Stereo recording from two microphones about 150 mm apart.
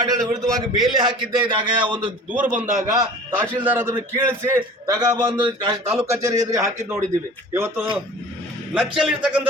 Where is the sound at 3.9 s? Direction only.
25° right (ahead or behind).